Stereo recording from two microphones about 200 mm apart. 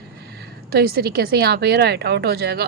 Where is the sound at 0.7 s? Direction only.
50° right (ahead or behind).